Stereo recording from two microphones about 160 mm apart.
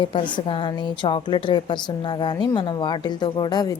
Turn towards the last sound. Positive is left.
turn(degrees=25)  # may be behind; listen again after turning